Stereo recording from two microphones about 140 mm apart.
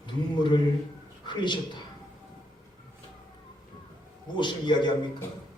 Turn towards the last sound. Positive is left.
turn(degrees=30)  # may be behind; listen again after turning